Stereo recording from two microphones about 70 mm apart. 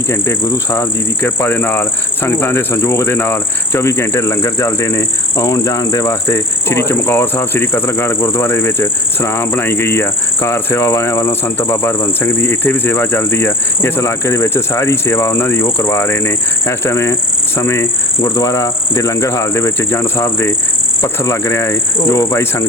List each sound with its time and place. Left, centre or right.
0.1 s speech: left
5.5 s cricket: left
6.2 s speech: left
17.6 s cricket: left
19.5 s speech: left